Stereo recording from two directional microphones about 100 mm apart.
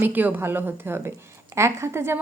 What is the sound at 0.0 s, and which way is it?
A woman's voice, 20° right (ahead or behind).